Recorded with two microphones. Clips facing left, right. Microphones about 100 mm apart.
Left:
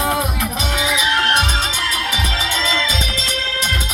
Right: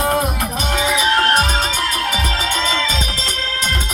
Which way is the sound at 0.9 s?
40° right (ahead or behind).